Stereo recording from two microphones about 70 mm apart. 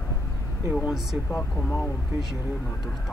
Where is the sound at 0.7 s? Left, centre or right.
Centre.